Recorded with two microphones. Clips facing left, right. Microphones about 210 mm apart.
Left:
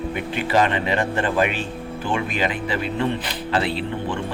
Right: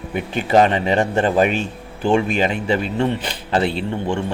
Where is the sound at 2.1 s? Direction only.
25° right (ahead or behind).